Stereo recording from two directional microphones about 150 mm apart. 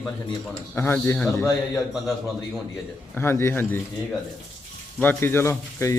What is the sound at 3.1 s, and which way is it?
Speech, 15° left (ahead or behind).